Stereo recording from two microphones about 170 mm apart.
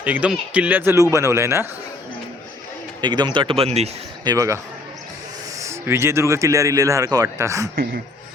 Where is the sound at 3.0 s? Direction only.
25° right (ahead or behind).